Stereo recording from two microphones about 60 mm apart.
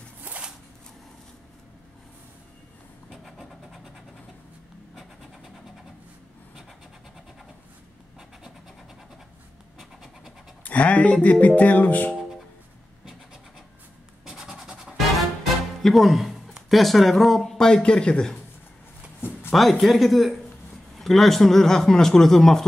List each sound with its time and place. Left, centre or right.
0.2 s shuffling cards: right
3.1 s vehicle: centre
10.6 s speech: left
14.2 s scratch: centre
15.0 s music: centre
15.8 s speech: centre
19.5 s a man's voice: centre